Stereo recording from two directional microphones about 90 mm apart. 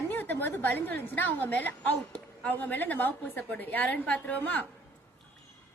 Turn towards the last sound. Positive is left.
turn(degrees=20)  # may be behind; listen again after turning